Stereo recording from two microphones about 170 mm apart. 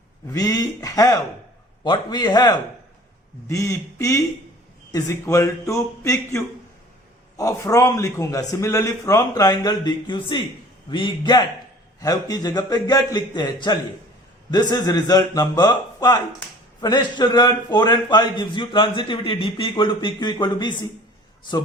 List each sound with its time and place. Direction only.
0.3 s a man's voice: 20° left (ahead or behind)